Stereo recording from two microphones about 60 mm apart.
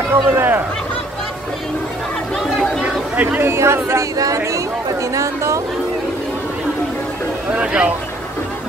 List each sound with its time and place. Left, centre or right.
0.1 s speech: right
2.3 s chatter: centre
3.2 s speech: right
3.4 s speech: right
4.2 s a woman's voice: right
7.5 s speech: centre